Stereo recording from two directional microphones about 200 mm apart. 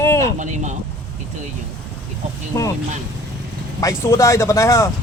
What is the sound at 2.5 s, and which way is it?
Speech, 15° left (ahead or behind).